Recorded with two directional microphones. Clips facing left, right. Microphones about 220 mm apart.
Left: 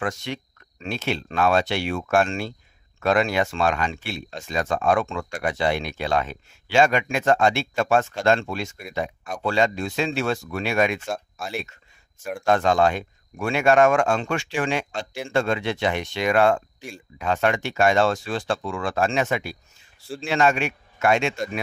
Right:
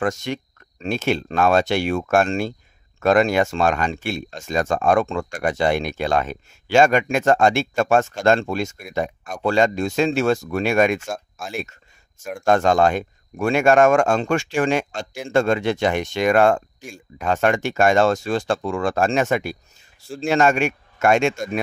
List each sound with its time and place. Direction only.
0.0 s speech: 45° right (ahead or behind)
12.2 s speech: centre (ahead or behind)
12.4 s speech: 45° right (ahead or behind)